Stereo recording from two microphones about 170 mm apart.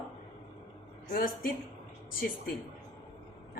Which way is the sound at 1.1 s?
55° left (ahead or behind).